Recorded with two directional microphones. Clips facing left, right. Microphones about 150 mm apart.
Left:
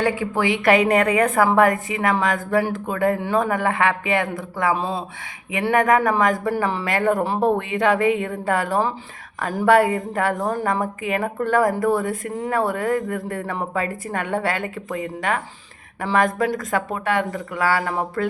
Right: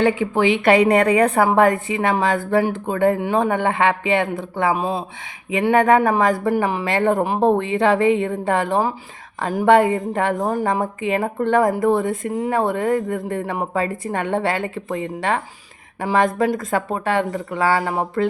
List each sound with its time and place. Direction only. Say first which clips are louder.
0.0 s a woman's voice: right 4 dB; 25° right (ahead or behind)
0.8 s a woman's voice: right 3 dB; 35° right (ahead or behind)
3.2 s a woman's voice: right 2 dB; 20° right (ahead or behind)
4.7 s speech: right 2 dB; 15° right (ahead or behind)
5.7 s a woman's voice: right 2 dB; 30° right (ahead or behind)
6.5 s a woman's voice: right 3 dB; 15° right (ahead or behind)